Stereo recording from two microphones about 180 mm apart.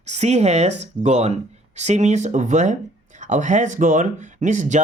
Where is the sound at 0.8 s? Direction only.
40° right (ahead or behind).